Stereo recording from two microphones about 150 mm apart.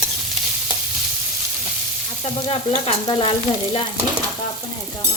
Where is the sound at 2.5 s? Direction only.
40° left (ahead or behind).